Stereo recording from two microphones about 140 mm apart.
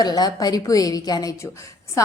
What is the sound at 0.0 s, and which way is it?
A woman's voice, 30° left (ahead or behind).